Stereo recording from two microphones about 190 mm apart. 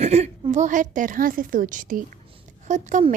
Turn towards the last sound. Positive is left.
turn(degrees=-40)  # may be behind; listen again after turning